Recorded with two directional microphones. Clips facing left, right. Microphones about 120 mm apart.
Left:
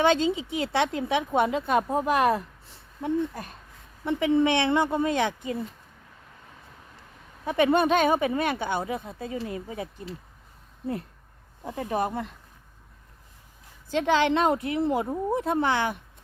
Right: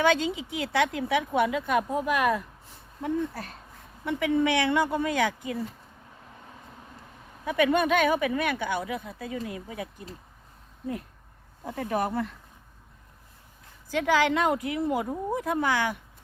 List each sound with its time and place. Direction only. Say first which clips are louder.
0.0 s speech: left 2 dB; 25° left (ahead or behind)
3.0 s speech: left 2 dB; 20° left (ahead or behind)
7.4 s speech: left 2 dB; 30° left (ahead or behind)
11.6 s speech: left 1 dB; 20° left (ahead or behind)
13.9 s speech: left 1 dB; 25° left (ahead or behind)